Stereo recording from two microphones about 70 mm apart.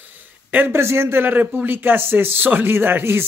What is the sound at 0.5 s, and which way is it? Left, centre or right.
Speech, right.